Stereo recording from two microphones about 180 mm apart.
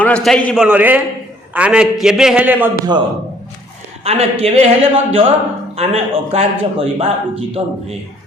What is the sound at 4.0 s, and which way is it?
Speech, 35° right (ahead or behind).